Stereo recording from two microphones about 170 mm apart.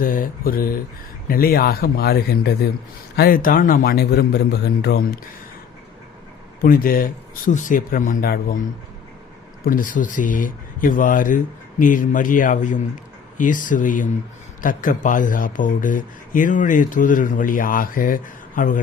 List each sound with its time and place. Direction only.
0.0 s a man's voice: 55° left (ahead or behind)
3.2 s a man's voice: 60° left (ahead or behind)
6.6 s speech: 60° left (ahead or behind)
9.6 s speech: 55° left (ahead or behind)